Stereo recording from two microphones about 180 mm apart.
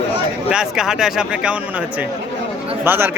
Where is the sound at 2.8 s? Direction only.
10° right (ahead or behind).